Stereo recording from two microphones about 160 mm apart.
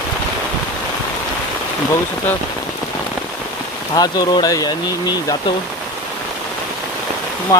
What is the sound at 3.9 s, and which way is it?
Speech, 25° left (ahead or behind).